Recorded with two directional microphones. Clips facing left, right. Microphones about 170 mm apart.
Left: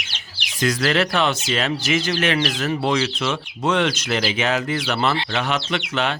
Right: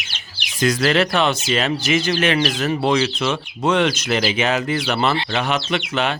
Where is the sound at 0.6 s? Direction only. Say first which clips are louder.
Right 3 dB; 20° right (ahead or behind).